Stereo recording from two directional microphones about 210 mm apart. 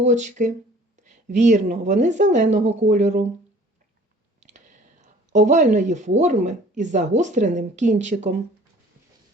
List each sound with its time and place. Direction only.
0.0 s a woman's voice: 35° right (ahead or behind)
4.4 s speech: 35° right (ahead or behind)